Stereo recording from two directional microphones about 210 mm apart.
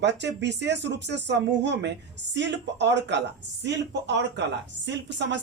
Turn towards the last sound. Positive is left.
turn(degrees=-55)  # may be behind; listen again after turning